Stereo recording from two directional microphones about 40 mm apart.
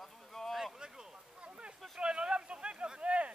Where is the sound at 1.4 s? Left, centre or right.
Right.